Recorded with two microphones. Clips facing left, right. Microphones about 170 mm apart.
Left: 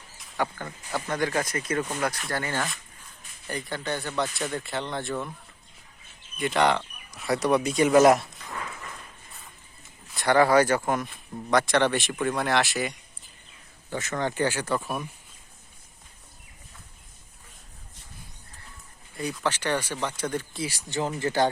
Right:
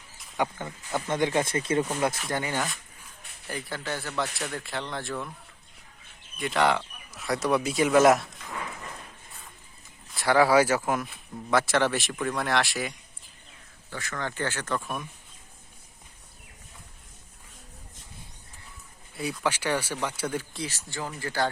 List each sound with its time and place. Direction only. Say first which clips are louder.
0.6 s speech: right 1 dB; 20° right (ahead or behind)
2.3 s speech: even; 15° right (ahead or behind)
3.4 s speech: left 2 dB; 5° right (ahead or behind)
6.3 s speech: left 1 dB; centre (ahead or behind)
10.1 s speech: left 1 dB; centre (ahead or behind)
13.9 s speech: left 5 dB; 20° left (ahead or behind)
19.1 s speech: even; 5° right (ahead or behind)
20.7 s speech: left 6 dB; 15° left (ahead or behind)